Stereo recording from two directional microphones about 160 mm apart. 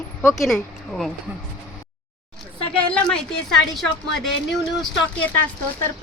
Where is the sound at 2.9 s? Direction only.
5° left (ahead or behind).